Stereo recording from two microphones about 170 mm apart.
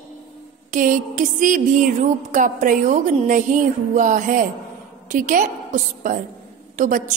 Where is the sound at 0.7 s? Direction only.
50° right (ahead or behind).